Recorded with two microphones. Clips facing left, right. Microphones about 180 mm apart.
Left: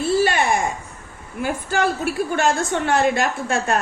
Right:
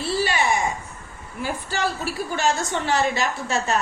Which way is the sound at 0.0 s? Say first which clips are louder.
Left 5 dB; 50° left (ahead or behind).